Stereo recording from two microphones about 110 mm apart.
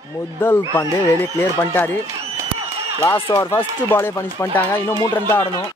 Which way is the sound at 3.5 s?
20° left (ahead or behind).